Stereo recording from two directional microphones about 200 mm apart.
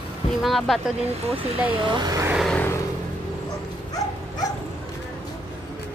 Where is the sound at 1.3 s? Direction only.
30° right (ahead or behind).